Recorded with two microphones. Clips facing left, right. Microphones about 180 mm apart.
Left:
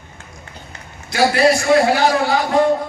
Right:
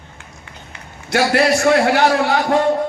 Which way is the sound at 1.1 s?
70° right (ahead or behind).